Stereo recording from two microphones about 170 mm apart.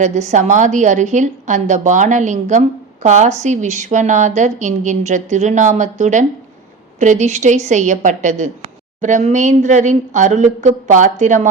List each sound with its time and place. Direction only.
0.0 s a woman's voice: 45° right (ahead or behind)